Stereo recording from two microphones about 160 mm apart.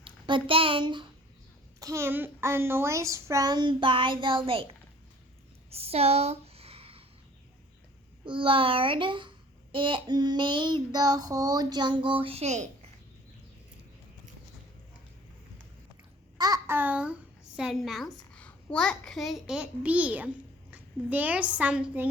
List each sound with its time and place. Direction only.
0.0 s speech: 30° right (ahead or behind)
1.8 s a child's voice: 15° right (ahead or behind); by 4.7 s 35° right (ahead or behind)
5.7 s a sound: 40° right (ahead or behind)
8.2 s a child's voice: 30° right (ahead or behind)
16.4 s a sound: 20° right (ahead or behind)
17.6 s a child's voice: centre (ahead or behind)